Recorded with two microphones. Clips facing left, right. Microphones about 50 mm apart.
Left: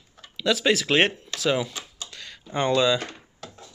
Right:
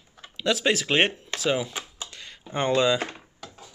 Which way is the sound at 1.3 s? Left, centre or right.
Right.